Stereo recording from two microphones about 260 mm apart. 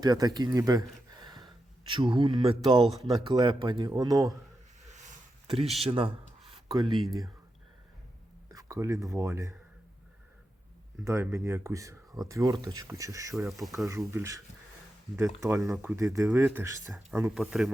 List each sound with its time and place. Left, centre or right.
0.0 s speech: centre
1.1 s a sound: centre
3.0 s speech: centre
4.9 s a sound: right
8.4 s speech: centre
11.0 s speech: centre
13.3 s speech: centre
13.7 s speech: centre